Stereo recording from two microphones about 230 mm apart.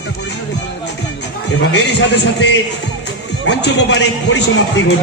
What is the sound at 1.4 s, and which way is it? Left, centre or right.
A man's voice, left.